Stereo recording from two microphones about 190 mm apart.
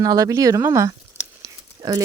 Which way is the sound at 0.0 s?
15° right (ahead or behind).